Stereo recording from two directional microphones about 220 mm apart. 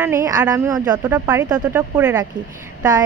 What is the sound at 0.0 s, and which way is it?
A woman's voice, 15° right (ahead or behind).